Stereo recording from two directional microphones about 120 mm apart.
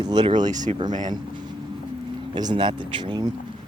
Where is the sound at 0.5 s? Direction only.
90° right.